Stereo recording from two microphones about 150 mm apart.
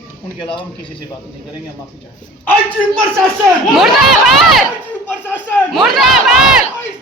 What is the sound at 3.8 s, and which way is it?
Speech, centre (ahead or behind).